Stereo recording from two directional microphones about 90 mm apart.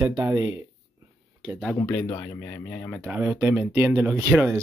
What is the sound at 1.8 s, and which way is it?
Speech, 20° left (ahead or behind).